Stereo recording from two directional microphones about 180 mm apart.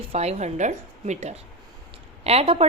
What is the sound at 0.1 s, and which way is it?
A woman's voice, 35° right (ahead or behind).